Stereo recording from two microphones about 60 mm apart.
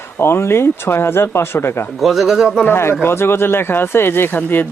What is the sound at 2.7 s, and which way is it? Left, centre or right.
Speech, left.